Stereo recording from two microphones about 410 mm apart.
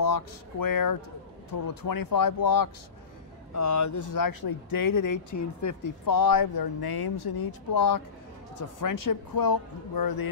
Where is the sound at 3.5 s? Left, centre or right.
Left.